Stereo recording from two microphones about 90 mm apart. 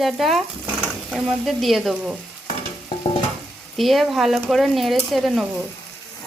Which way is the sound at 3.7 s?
Centre (ahead or behind).